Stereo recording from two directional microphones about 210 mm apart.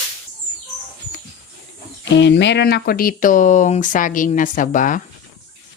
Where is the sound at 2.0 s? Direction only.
55° left (ahead or behind); by 5.0 s 40° left (ahead or behind).